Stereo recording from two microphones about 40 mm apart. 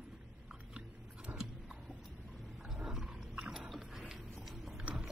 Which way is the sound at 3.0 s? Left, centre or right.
Centre.